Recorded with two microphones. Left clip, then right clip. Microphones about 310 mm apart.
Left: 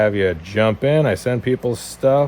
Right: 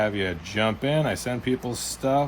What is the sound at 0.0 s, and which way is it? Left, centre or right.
Speech, left.